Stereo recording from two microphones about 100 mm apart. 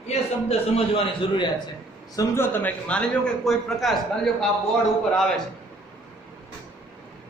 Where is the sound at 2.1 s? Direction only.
25° left (ahead or behind); by 4.4 s centre (ahead or behind).